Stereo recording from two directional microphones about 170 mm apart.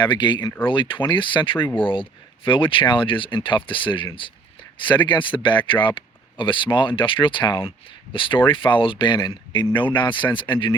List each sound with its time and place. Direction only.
0.0 s speech: 25° left (ahead or behind)